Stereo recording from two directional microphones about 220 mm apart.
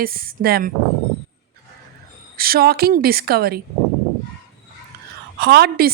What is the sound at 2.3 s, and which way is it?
A woman's voice, 45° right (ahead or behind).